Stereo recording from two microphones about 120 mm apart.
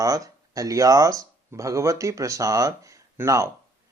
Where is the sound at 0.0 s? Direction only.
30° right (ahead or behind).